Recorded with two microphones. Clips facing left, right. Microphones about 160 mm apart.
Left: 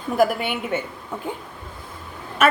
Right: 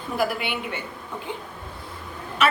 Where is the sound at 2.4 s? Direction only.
50° left (ahead or behind).